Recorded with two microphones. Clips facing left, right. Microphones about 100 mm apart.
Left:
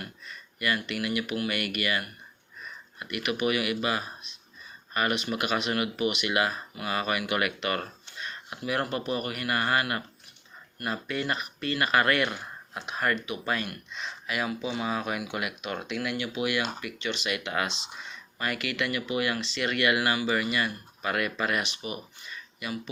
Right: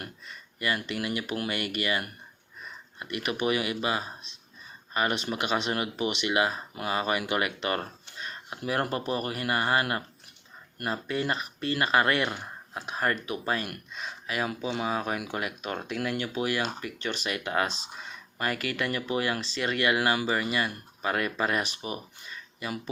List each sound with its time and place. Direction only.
0.3 s speech: 25° right (ahead or behind)
10.8 s speech: 30° right (ahead or behind)
13.7 s speech: 45° right (ahead or behind)
14.8 s speech: 35° right (ahead or behind)